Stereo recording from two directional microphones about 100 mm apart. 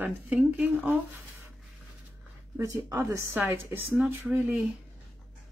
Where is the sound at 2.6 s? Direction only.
30° right (ahead or behind); by 4.6 s 10° right (ahead or behind).